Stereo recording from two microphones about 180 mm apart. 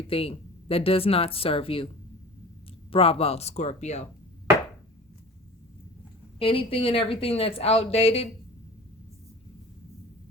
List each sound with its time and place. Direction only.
0.1 s a woman's voice: 30° left (ahead or behind)
2.9 s a woman's voice: 30° left (ahead or behind)
6.4 s a woman's voice: 30° left (ahead or behind)